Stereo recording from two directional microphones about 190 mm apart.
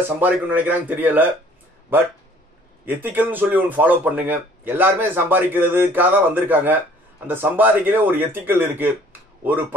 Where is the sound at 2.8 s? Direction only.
10° right (ahead or behind).